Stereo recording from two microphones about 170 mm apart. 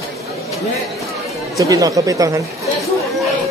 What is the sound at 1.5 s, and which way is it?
Speech, 20° right (ahead or behind).